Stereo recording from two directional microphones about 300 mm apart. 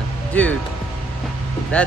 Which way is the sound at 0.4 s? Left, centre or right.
Centre.